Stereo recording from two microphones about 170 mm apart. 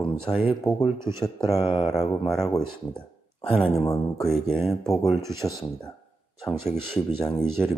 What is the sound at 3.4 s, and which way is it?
Speech, 30° left (ahead or behind).